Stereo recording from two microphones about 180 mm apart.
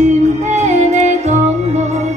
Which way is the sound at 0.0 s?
40° right (ahead or behind).